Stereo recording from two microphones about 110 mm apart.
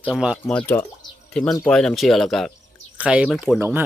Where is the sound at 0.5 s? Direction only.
15° left (ahead or behind).